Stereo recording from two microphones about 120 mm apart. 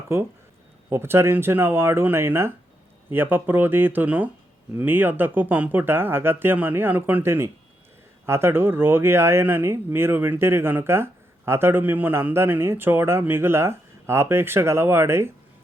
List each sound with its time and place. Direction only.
0.9 s speech: 20° right (ahead or behind)